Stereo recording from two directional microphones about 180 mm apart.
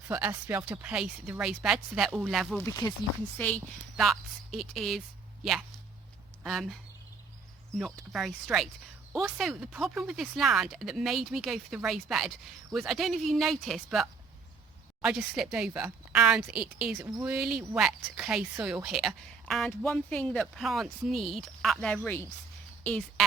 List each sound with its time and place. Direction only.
0.1 s speech: 10° right (ahead or behind)
2.6 s speech: 20° left (ahead or behind)
3.3 s speech: 5° left (ahead or behind)
7.8 s speech: centre (ahead or behind)